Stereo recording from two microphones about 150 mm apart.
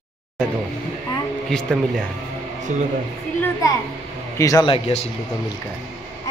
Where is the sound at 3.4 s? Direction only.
20° left (ahead or behind).